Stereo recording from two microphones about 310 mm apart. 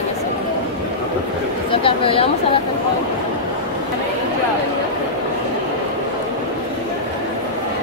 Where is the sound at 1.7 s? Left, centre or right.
Centre.